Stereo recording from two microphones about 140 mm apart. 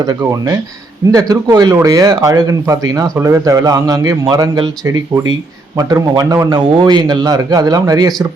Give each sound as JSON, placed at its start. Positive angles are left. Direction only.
{"t": 0.0, "sound": "speech", "side_deg": -25}